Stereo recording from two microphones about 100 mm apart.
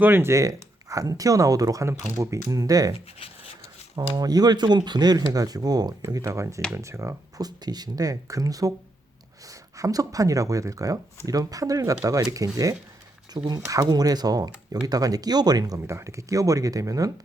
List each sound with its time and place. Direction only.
0.0 s speech: 20° right (ahead or behind); by 2.9 s 35° right (ahead or behind)
2.9 s speech: 70° left (ahead or behind)
4.1 s speech: 40° right (ahead or behind)
7.4 s speech: 40° right (ahead or behind)